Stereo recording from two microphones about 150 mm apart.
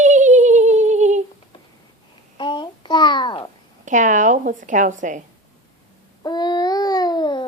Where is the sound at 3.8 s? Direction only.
55° right (ahead or behind).